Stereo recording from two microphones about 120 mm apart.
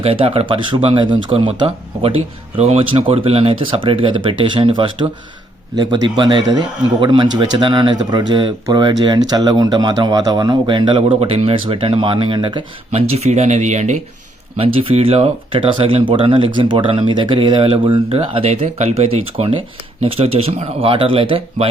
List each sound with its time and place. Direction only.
0.0 s a man's voice: 50° right (ahead or behind)
12.9 s speech: 60° right (ahead or behind); by 14.0 s 75° right (ahead or behind)
14.6 s speech: 55° right (ahead or behind)